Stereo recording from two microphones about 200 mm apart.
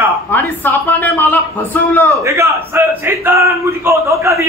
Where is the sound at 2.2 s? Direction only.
15° right (ahead or behind).